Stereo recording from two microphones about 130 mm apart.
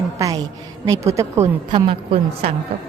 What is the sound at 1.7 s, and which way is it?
Speech, 45° right (ahead or behind).